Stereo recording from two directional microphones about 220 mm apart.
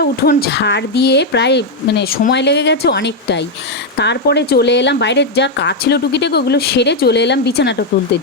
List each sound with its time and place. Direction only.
0.0 s speech: 45° left (ahead or behind)